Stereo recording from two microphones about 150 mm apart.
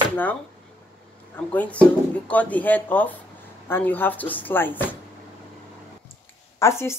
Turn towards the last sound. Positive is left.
turn(degrees=20)  # may be behind; listen again after turning